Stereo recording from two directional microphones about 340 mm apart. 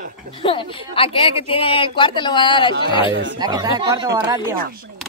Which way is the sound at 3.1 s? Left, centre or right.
Right.